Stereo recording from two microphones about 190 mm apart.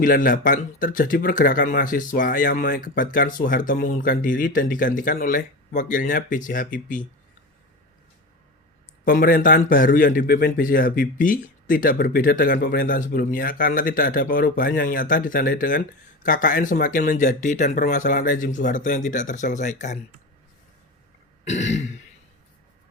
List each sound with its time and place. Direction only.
0.0 s speech: 45° left (ahead or behind)
9.0 s speech: 50° left (ahead or behind)
21.4 s throat clearing: 35° left (ahead or behind)